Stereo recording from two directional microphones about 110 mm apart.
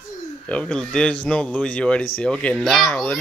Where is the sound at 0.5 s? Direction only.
10° left (ahead or behind).